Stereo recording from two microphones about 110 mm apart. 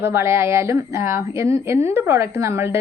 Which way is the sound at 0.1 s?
25° right (ahead or behind).